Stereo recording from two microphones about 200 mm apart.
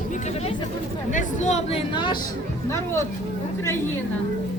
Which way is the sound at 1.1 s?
40° left (ahead or behind).